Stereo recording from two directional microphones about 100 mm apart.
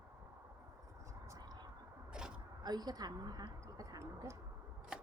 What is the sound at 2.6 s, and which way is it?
Speech, 40° right (ahead or behind).